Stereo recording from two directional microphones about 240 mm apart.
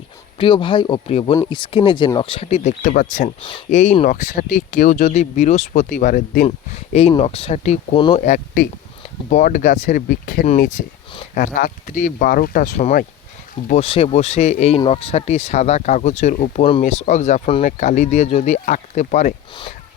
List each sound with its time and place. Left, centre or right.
0.3 s speech: left